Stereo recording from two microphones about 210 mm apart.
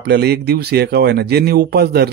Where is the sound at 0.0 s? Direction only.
50° right (ahead or behind).